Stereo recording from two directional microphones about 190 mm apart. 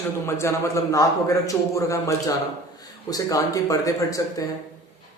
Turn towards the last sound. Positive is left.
turn(degrees=15)  # may be behind; listen again after turning